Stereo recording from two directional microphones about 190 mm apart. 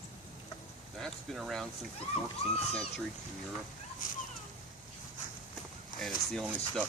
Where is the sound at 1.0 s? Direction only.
Centre (ahead or behind).